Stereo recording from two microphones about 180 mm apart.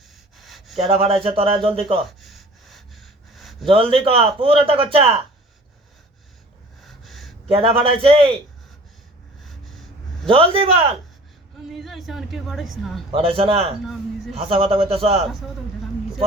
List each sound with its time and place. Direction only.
0.3 s gasp: centre (ahead or behind)
0.9 s a man's voice: 30° right (ahead or behind)
2.0 s gasp: centre (ahead or behind)
3.7 s a man's voice: 30° right (ahead or behind)
6.8 s gasp: centre (ahead or behind)
7.4 s a man's voice: 30° right (ahead or behind)
10.2 s a man's voice: 30° right (ahead or behind)
11.7 s a woman's voice: centre (ahead or behind)
13.1 s a man's voice: 30° right (ahead or behind)